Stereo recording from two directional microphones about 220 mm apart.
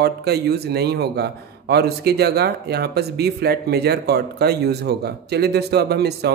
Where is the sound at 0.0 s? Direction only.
45° right (ahead or behind).